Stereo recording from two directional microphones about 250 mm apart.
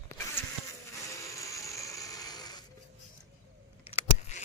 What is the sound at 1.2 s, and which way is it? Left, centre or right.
Mechanisms, centre.